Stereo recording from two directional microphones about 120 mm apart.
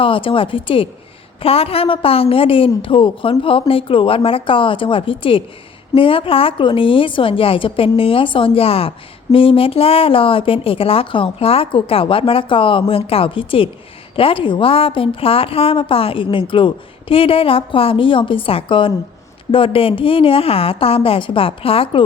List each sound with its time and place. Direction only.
0.0 s a woman's voice: 45° left (ahead or behind)